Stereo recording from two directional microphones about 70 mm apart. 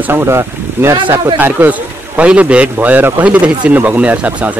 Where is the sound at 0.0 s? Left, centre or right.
Right.